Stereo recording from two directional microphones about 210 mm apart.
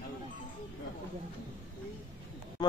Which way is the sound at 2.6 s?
20° left (ahead or behind).